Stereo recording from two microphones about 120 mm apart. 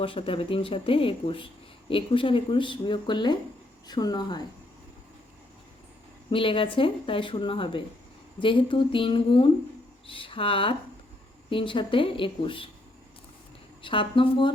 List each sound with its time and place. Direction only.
0.0 s speech: 50° left (ahead or behind)
6.3 s speech: 45° left (ahead or behind)
13.8 s speech: 45° left (ahead or behind)